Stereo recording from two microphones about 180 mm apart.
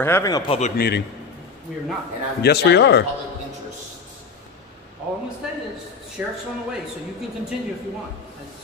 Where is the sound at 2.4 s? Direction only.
65° left (ahead or behind).